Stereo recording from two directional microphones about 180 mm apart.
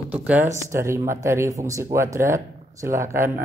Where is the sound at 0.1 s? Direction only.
10° right (ahead or behind).